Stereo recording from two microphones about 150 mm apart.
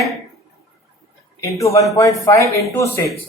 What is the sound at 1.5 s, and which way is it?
A woman's voice, 20° left (ahead or behind).